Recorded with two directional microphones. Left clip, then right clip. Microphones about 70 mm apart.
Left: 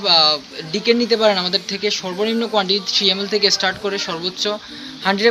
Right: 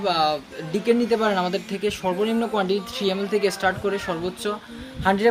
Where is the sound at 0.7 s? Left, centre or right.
Right.